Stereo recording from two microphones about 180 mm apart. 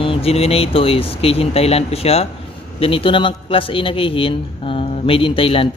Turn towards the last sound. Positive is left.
turn(degrees=30)  # may be behind; listen again after turning